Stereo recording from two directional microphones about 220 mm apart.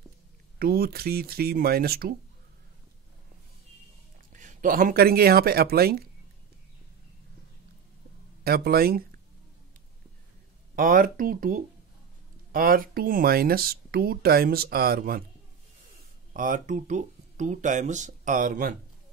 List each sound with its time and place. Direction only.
0.6 s speech: 45° right (ahead or behind)
4.3 s speech: 35° right (ahead or behind)
8.5 s speech: 45° right (ahead or behind)
10.8 s speech: 40° right (ahead or behind)
16.3 s speech: 35° right (ahead or behind)